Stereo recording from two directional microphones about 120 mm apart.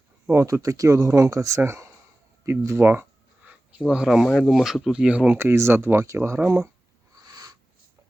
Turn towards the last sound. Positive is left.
turn(degrees=-30)  # may be behind; listen again after turning